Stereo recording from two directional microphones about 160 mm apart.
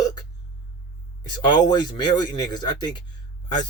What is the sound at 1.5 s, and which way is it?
Speech, 25° left (ahead or behind).